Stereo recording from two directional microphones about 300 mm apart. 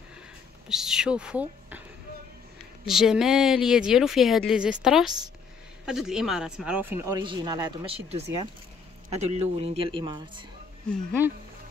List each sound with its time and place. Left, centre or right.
0.7 s speech: centre
2.8 s speech: centre
10.9 s speech: centre